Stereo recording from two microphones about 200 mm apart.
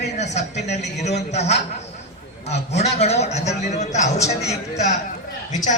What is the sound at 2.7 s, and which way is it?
A man's voice, 35° left (ahead or behind).